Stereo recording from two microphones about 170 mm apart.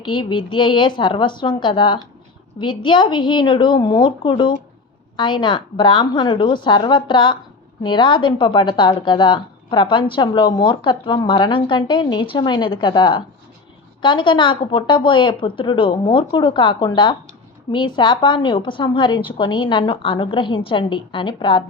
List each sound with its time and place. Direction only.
0.0 s a woman's voice: 25° left (ahead or behind)